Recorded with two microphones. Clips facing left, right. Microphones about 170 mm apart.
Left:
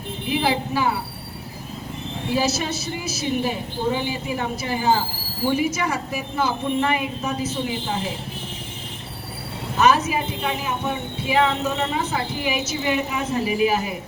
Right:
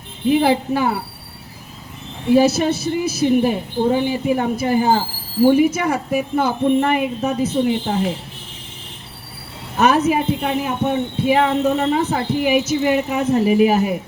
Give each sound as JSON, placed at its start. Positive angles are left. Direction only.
{"t": 0.3, "sound": "speech", "side_deg": -55}
{"t": 2.3, "sound": "speech", "side_deg": -55}
{"t": 9.8, "sound": "speech", "side_deg": -55}